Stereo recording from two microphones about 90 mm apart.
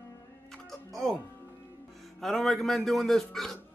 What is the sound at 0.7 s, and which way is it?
Music, centre (ahead or behind).